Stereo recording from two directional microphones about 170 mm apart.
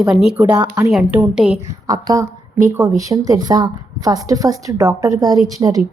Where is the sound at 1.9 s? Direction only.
20° right (ahead or behind).